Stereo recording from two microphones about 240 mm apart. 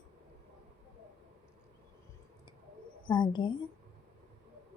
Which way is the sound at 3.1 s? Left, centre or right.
Centre.